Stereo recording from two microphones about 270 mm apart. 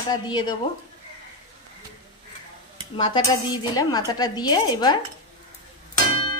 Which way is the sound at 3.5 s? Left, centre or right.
Centre.